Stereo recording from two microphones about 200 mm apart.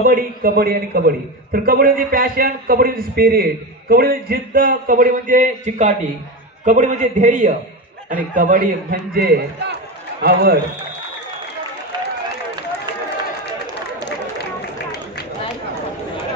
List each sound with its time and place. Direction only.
0.0 s a man's voice: 45° right (ahead or behind)
14.0 s run: 55° left (ahead or behind)